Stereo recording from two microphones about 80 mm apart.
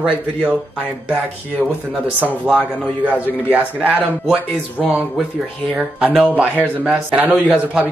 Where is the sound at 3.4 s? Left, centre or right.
Centre.